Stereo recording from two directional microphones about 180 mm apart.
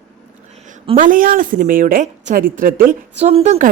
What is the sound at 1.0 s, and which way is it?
A woman's voice, 50° right (ahead or behind).